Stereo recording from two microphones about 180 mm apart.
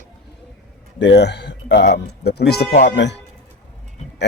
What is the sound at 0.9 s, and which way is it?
Speech, 75° left (ahead or behind).